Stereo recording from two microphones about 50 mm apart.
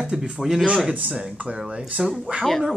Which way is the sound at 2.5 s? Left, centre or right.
Centre.